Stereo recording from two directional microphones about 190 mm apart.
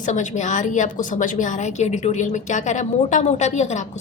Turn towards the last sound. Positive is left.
turn(degrees=35)  # may be behind; listen again after turning